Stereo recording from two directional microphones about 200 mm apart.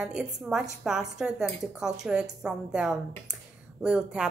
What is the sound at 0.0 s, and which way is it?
A woman's voice, centre (ahead or behind).